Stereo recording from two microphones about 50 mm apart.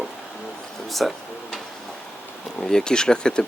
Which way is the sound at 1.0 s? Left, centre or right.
Centre.